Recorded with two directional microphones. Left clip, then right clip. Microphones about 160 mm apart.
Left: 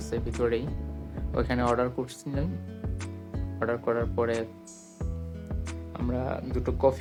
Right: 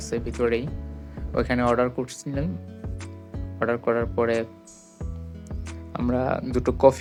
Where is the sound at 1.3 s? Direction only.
10° right (ahead or behind).